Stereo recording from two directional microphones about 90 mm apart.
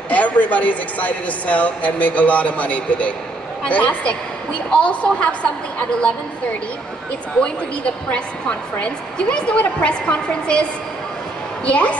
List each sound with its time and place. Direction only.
0.1 s a woman's voice: 15° left (ahead or behind)
8.1 s a woman's voice: 15° left (ahead or behind)